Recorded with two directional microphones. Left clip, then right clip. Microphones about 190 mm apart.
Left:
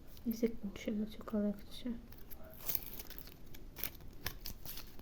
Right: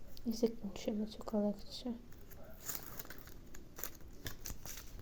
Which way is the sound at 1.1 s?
40° left (ahead or behind).